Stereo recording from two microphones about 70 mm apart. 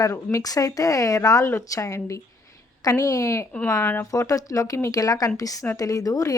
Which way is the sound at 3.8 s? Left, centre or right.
Left.